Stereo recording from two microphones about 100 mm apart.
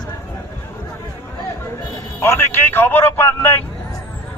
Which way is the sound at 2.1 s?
25° left (ahead or behind).